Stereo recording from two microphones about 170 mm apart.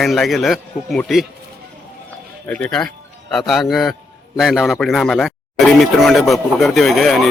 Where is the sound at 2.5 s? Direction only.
5° left (ahead or behind).